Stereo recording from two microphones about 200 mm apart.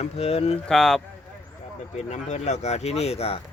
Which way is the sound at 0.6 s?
5° left (ahead or behind).